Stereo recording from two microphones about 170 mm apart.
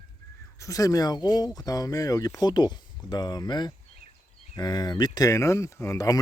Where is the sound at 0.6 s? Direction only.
20° left (ahead or behind).